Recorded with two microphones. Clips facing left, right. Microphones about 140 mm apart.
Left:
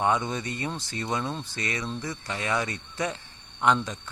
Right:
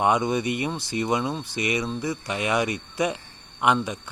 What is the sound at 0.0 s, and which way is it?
Speech, 15° right (ahead or behind).